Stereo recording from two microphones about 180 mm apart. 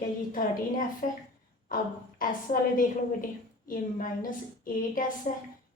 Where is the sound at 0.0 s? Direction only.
50° left (ahead or behind).